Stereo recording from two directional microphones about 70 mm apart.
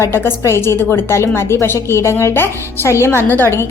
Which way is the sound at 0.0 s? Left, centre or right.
Left.